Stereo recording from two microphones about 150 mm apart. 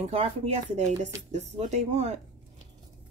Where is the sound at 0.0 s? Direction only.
40° right (ahead or behind).